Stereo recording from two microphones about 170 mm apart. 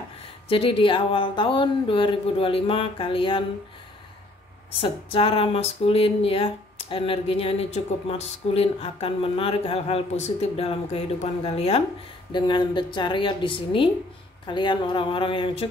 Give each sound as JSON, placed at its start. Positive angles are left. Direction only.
{"t": 0.5, "sound": "speech", "side_deg": 30}
{"t": 4.7, "sound": "a woman's voice", "side_deg": 35}